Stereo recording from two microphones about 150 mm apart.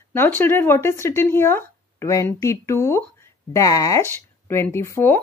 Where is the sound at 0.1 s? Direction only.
15° left (ahead or behind).